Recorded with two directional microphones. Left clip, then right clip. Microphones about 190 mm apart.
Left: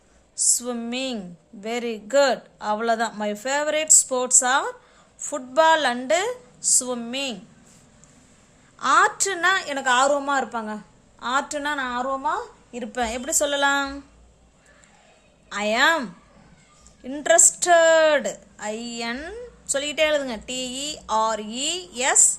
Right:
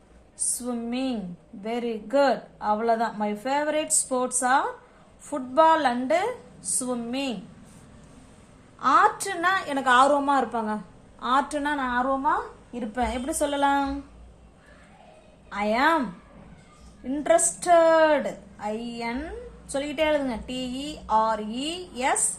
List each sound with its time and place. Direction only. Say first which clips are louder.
0.6 s a woman's voice: left 2 dB; 60° left (ahead or behind)
8.8 s a woman's voice: left 1 dB; 45° left (ahead or behind)
15.4 s a woman's voice: left 3 dB; 50° left (ahead or behind)